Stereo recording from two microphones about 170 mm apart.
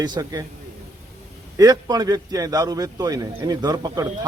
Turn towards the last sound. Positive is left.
turn(degrees=-25)  # may be behind; listen again after turning